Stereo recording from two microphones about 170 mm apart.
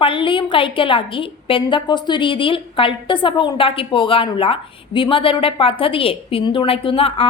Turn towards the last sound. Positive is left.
turn(degrees=35)  # may be behind; listen again after turning